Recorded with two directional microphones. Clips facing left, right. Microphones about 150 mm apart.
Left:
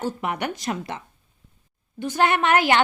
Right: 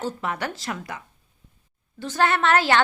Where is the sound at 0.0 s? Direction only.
15° left (ahead or behind).